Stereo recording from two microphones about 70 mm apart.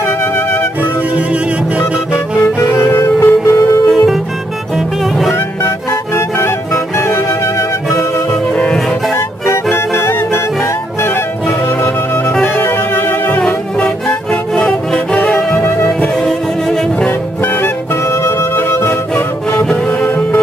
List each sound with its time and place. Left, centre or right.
2.6 s music: left
3.9 s music: centre
6.1 s music: left
8.3 s music: centre
9.7 s music: left
11.4 s music: centre
12.5 s music: left
15.6 s music: left
16.2 s music: centre
18.6 s music: left
19.1 s music: centre